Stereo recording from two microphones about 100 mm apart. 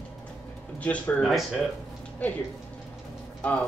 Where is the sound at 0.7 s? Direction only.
15° left (ahead or behind).